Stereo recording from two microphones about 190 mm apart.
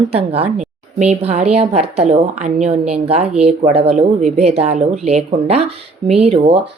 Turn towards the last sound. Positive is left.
turn(degrees=-30)  # may be behind; listen again after turning